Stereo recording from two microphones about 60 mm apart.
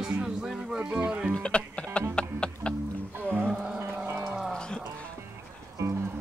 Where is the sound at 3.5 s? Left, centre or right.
Centre.